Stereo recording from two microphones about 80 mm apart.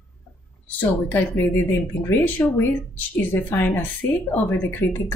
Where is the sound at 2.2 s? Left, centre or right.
Left.